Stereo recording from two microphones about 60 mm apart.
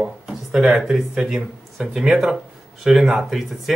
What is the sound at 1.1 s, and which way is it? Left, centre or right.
Speech, centre.